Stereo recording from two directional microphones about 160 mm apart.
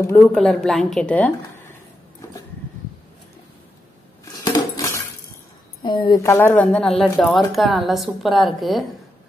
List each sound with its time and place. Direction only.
0.0 s a woman's voice: 10° left (ahead or behind)
4.2 s dishes: 20° left (ahead or behind)
5.8 s speech: 30° left (ahead or behind)
6.2 s a woman's voice: 15° left (ahead or behind)